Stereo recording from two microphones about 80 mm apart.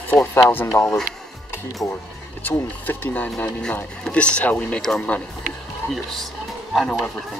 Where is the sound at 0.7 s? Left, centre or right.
Left.